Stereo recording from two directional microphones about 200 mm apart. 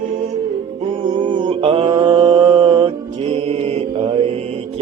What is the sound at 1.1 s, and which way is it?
Mantra, 25° right (ahead or behind).